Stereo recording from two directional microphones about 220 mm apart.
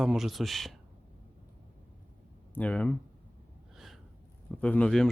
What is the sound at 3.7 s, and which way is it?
Gasp, centre (ahead or behind).